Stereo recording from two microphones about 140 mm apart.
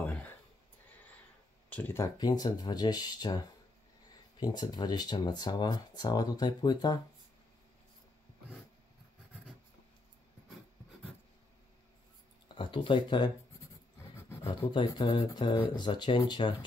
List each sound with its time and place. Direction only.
0.0 s a sound: 10° left (ahead or behind)
1.7 s speech: 15° left (ahead or behind)
2.1 s speech: 30° left (ahead or behind)
12.5 s speech: 35° left (ahead or behind)
14.7 s speech: 35° left (ahead or behind)